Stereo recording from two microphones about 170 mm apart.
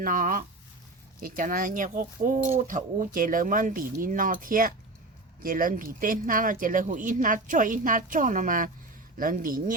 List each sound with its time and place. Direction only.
0.0 s speech: 50° right (ahead or behind)